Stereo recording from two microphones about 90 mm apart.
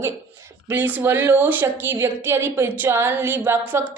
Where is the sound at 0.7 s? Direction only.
20° right (ahead or behind).